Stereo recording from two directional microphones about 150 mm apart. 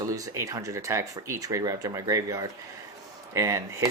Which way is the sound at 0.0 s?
20° right (ahead or behind).